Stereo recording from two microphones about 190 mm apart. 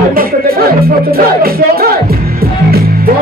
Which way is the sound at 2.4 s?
50° right (ahead or behind).